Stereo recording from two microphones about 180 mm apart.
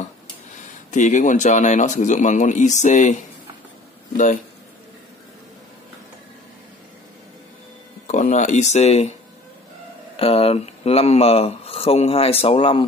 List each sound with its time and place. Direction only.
0.9 s speech: 45° left (ahead or behind)
8.1 s speech: 40° left (ahead or behind)
10.1 s speech: 35° left (ahead or behind)